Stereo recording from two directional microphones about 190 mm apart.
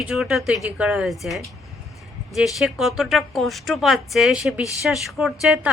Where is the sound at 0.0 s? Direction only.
Centre (ahead or behind).